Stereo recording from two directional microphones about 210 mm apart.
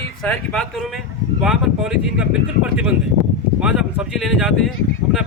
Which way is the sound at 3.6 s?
5° right (ahead or behind).